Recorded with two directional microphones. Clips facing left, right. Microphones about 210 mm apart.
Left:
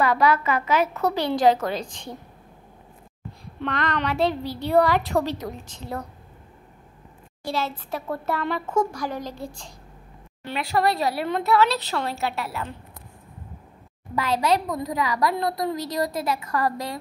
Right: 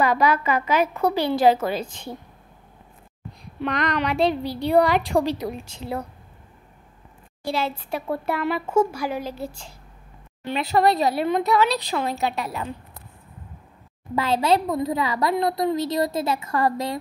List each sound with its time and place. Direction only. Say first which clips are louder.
0.0 s a woman's voice: even; 15° right (ahead or behind)
3.6 s a woman's voice: right 2 dB; 15° right (ahead or behind)
7.5 s a woman's voice: right 1 dB; 10° right (ahead or behind)
10.4 s a woman's voice: right 3 dB; 20° right (ahead or behind)
14.1 s a woman's voice: right 2 dB; 25° right (ahead or behind)